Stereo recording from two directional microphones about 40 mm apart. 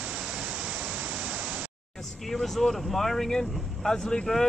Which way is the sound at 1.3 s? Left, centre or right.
Right.